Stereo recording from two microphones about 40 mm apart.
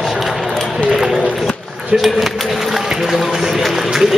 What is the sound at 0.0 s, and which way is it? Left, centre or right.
Run, centre.